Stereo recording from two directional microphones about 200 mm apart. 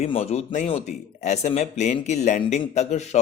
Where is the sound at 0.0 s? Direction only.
30° left (ahead or behind).